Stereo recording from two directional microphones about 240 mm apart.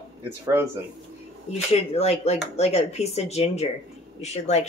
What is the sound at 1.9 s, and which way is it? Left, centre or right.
Speech, left.